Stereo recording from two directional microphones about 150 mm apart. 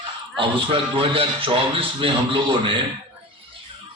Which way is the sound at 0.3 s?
35° right (ahead or behind).